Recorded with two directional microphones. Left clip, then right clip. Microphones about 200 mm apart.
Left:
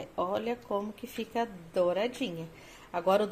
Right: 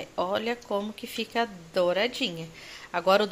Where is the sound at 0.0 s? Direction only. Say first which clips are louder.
Right 4 dB; 5° right (ahead or behind).